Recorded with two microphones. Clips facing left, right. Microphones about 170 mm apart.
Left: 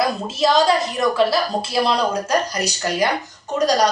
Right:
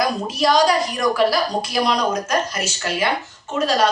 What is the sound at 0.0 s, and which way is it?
A woman's voice, 25° left (ahead or behind).